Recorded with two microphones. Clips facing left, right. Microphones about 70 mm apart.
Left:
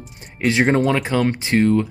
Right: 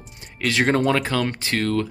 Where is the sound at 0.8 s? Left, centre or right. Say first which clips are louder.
Left 2 dB; centre.